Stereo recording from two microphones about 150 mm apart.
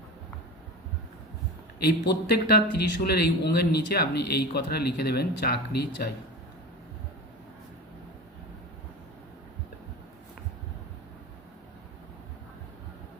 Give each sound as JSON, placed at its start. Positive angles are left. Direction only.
{"t": 1.8, "sound": "speech", "side_deg": 90}